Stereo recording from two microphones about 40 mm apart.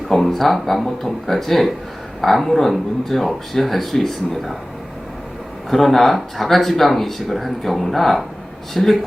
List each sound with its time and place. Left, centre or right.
0.1 s speech: centre
5.7 s speech: centre